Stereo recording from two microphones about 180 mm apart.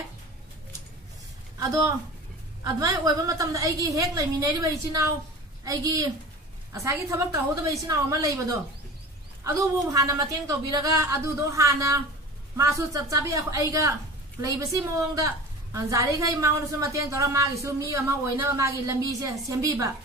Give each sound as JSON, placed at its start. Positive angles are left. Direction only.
{"t": 1.6, "sound": "a woman's voice", "side_deg": -15}